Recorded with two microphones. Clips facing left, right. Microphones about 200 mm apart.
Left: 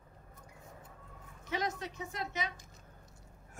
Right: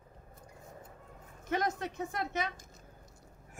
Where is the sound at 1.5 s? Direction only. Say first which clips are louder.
Right 4 dB; 50° right (ahead or behind).